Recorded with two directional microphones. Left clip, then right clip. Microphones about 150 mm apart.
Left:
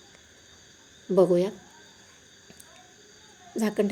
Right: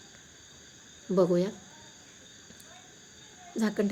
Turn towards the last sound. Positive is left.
turn(degrees=15)  # may be behind; listen again after turning